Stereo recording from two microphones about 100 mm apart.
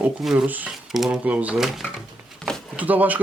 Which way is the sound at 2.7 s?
15° right (ahead or behind).